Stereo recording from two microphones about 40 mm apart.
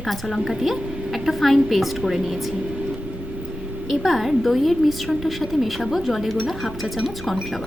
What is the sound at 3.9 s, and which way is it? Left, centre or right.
Speech, centre.